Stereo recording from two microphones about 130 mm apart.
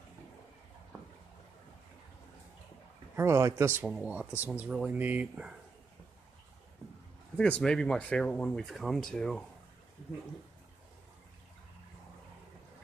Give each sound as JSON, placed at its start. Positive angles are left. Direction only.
{"t": 3.2, "sound": "speech", "side_deg": -25}
{"t": 3.9, "sound": "speech", "side_deg": -10}
{"t": 7.3, "sound": "speech", "side_deg": 10}